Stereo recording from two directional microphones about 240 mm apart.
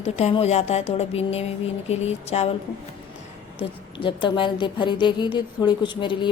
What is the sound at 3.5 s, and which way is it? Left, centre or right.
Speech, left.